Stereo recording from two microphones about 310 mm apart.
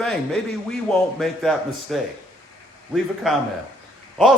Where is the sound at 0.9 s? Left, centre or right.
Centre.